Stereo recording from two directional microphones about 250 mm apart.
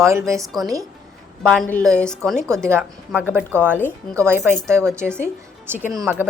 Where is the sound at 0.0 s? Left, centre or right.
Centre.